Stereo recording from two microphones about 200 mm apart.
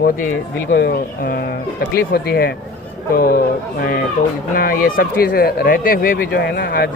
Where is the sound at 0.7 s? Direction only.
55° left (ahead or behind).